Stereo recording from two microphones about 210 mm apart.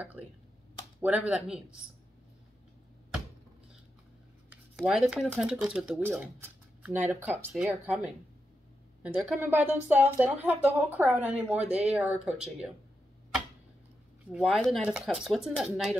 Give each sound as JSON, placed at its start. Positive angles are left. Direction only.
{"t": 1.0, "sound": "speech", "side_deg": -5}
{"t": 4.5, "sound": "speech", "side_deg": 0}
{"t": 14.3, "sound": "speech", "side_deg": 0}